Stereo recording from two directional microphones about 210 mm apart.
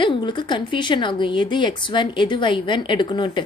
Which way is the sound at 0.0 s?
25° left (ahead or behind).